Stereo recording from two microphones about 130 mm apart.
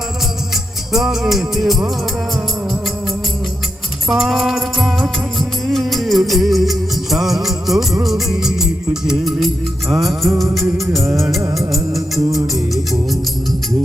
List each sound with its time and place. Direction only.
0.5 s music: centre (ahead or behind)
4.1 s music: centre (ahead or behind)
5.6 s music of bollywood: centre (ahead or behind)
8.0 s music: 5° right (ahead or behind)